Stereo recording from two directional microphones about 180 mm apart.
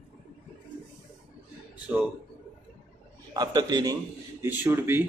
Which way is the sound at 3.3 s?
25° right (ahead or behind).